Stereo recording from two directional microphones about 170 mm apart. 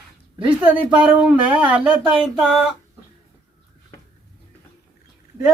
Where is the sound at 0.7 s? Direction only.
5° right (ahead or behind).